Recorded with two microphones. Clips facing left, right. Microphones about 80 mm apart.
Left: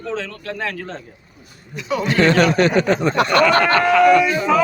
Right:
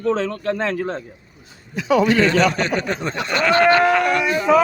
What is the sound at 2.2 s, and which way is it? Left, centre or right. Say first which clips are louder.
Speech: left 3 dB; left.